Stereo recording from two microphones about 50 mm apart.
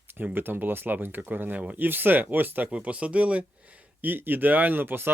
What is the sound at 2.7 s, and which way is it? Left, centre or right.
Speech, right.